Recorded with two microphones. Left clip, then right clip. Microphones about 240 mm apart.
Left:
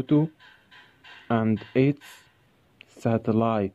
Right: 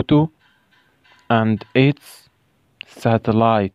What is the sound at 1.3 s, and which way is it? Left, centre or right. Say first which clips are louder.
Speech: right 8 dB; right.